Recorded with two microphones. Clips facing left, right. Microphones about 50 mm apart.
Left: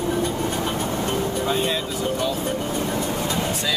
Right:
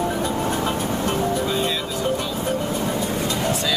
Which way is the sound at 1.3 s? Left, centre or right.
Left.